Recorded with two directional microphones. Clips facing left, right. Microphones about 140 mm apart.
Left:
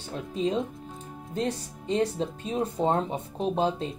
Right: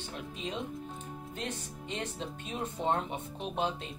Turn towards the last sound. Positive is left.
turn(degrees=35)  # may be behind; listen again after turning